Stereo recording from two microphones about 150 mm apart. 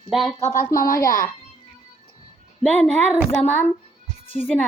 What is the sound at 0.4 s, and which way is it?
Speech, 60° left (ahead or behind).